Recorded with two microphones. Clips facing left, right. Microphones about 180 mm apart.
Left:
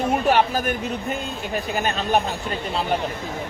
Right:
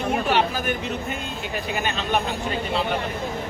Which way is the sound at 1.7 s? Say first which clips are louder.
Left 3 dB; 40° left (ahead or behind).